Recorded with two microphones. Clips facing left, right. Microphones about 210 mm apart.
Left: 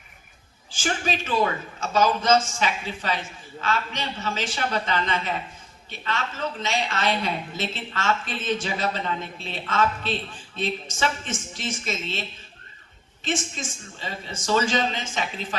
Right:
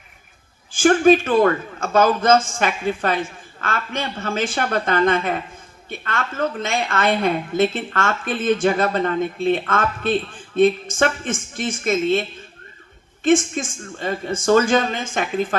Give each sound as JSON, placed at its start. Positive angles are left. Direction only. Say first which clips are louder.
{"t": 0.7, "sound": "a woman's voice", "louder": "right 14 dB", "side_deg": -55}
{"t": 13.2, "sound": "a woman's voice", "louder": "right 12 dB", "side_deg": -50}